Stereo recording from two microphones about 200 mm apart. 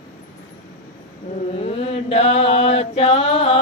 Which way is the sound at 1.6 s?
30° left (ahead or behind).